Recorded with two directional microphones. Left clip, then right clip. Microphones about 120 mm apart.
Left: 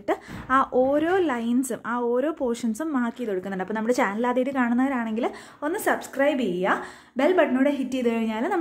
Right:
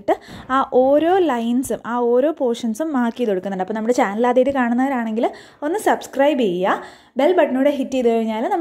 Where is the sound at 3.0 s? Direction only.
55° right (ahead or behind).